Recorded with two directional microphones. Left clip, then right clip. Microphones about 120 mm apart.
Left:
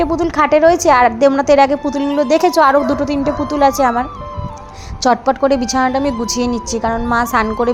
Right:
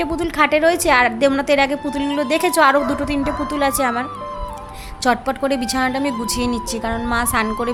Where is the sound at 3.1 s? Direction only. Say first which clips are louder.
Left 4 dB; 30° left (ahead or behind).